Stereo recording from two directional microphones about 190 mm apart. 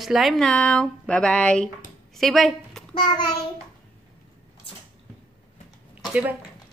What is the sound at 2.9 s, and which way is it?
Child singing, 25° left (ahead or behind).